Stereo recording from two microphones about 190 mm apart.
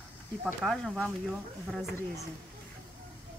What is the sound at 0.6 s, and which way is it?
Speech, centre (ahead or behind).